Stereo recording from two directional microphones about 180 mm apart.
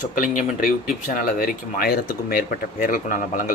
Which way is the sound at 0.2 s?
50° left (ahead or behind).